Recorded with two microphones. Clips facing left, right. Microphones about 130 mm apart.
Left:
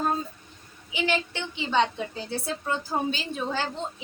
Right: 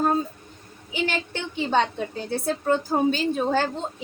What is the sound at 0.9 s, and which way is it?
A woman's voice, 45° right (ahead or behind).